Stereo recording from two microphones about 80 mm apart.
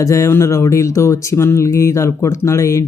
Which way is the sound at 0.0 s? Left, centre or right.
Left.